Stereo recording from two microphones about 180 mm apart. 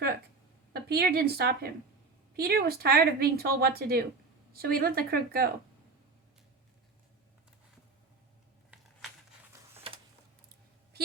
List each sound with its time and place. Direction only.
0.7 s a woman's voice: 60° right (ahead or behind)